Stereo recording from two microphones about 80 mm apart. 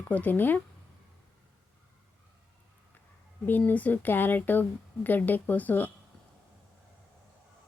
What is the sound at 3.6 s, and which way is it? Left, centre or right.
Speech, centre.